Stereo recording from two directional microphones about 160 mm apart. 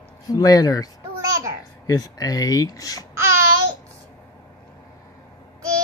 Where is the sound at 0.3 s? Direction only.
20° left (ahead or behind).